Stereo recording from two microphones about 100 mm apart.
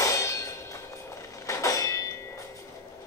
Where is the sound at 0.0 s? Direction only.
30° left (ahead or behind).